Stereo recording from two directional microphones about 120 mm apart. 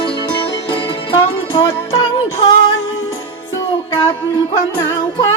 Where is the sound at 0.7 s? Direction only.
40° left (ahead or behind).